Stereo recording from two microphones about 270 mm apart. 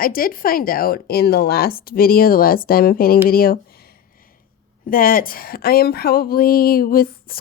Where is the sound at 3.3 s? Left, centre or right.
Left.